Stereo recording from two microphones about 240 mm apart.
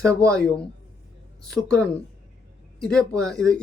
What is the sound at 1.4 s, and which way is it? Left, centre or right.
Speech, centre.